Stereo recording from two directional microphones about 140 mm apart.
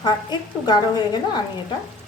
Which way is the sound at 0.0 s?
30° left (ahead or behind).